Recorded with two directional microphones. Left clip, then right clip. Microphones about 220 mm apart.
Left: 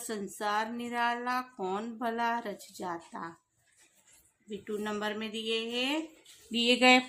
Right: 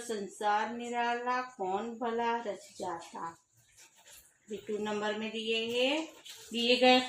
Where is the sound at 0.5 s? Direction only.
55° left (ahead or behind).